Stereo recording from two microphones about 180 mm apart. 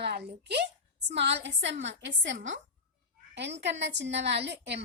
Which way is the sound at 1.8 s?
90° right.